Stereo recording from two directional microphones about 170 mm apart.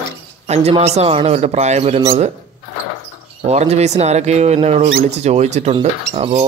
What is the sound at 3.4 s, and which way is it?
Speech, 40° right (ahead or behind).